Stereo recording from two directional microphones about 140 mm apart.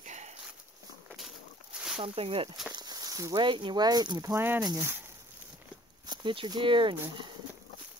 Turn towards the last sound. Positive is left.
turn(degrees=-35)  # may be behind; listen again after turning